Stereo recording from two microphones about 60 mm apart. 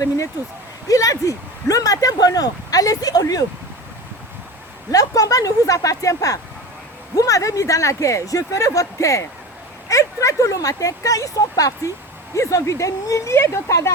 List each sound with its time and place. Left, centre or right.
0.9 s speech: left
4.9 s speech: left
12.4 s speech: left
13.3 s speech: left